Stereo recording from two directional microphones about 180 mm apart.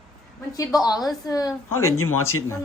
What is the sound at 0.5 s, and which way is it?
A woman's voice, 20° left (ahead or behind).